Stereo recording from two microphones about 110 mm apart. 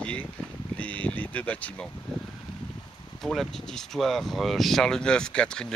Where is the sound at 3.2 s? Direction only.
Centre (ahead or behind).